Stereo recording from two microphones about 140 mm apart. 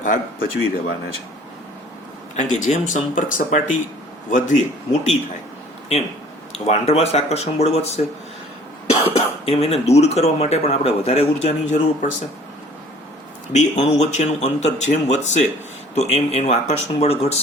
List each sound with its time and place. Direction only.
0.0 s speech: 70° left (ahead or behind)
2.3 s speech: 60° left (ahead or behind)
6.7 s speech: 50° left (ahead or behind)
13.5 s speech: 55° left (ahead or behind)